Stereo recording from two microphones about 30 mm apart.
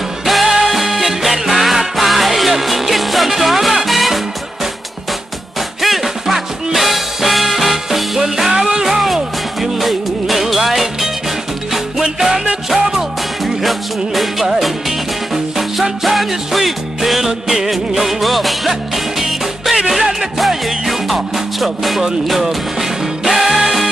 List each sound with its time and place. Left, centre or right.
0.3 s music: centre
5.8 s music: centre
12.6 s music: centre
17.3 s music: centre
17.6 s music: centre